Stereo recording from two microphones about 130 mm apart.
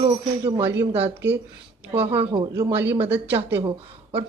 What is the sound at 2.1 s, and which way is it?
Speech, 40° right (ahead or behind).